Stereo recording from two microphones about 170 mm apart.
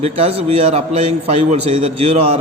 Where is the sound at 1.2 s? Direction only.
35° right (ahead or behind).